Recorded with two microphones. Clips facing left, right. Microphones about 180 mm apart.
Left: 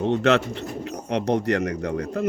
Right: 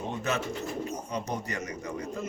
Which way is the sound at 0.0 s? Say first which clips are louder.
Left 11 dB; 75° left (ahead or behind).